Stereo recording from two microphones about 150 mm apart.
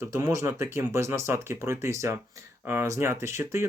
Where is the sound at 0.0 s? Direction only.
20° right (ahead or behind).